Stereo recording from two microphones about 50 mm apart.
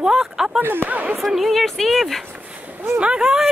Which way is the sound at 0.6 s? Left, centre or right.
Right.